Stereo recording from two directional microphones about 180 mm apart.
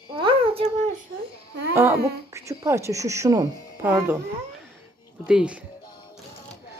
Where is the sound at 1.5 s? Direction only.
70° right (ahead or behind).